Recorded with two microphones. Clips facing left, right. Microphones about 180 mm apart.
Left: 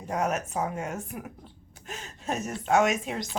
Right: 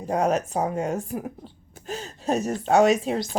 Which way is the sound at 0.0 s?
30° right (ahead or behind).